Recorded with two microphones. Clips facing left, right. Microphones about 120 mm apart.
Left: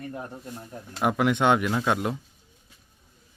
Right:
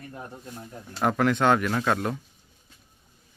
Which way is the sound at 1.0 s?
15° left (ahead or behind).